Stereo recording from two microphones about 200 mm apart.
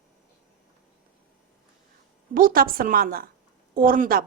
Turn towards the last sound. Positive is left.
turn(degrees=-45)  # may be behind; listen again after turning